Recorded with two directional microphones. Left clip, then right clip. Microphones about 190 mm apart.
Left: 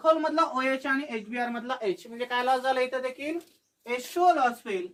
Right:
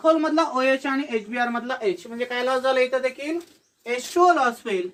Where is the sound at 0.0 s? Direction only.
15° left (ahead or behind).